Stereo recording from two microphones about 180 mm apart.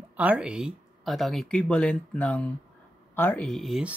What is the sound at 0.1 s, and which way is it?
Speech, 5° right (ahead or behind).